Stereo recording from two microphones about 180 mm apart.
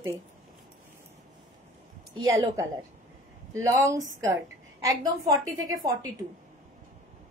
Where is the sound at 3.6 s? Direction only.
15° right (ahead or behind).